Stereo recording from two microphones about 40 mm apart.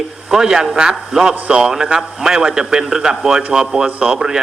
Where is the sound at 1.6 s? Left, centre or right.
Centre.